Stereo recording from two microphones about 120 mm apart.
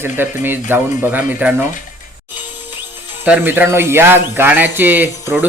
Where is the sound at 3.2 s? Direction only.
15° right (ahead or behind).